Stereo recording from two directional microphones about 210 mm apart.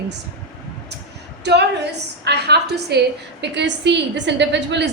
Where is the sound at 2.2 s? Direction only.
50° right (ahead or behind).